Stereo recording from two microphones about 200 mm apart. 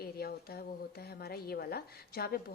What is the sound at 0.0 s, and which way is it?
A woman's voice, 50° left (ahead or behind).